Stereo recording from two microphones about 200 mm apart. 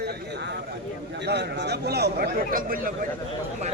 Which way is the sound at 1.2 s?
60° right (ahead or behind).